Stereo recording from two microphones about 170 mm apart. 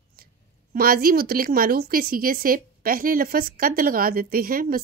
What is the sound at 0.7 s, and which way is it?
A woman's voice, 60° right (ahead or behind).